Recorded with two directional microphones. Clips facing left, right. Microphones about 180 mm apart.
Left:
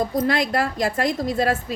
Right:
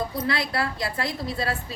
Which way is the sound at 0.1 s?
45° left (ahead or behind).